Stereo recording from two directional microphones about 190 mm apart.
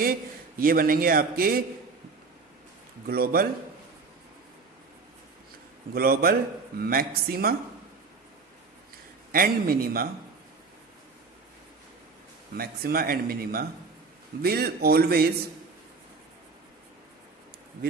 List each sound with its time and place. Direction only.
0.6 s speech: 50° right (ahead or behind)
3.1 s speech: 55° right (ahead or behind)
5.9 s speech: 50° right (ahead or behind)
9.3 s speech: 50° right (ahead or behind)
12.5 s speech: 50° right (ahead or behind)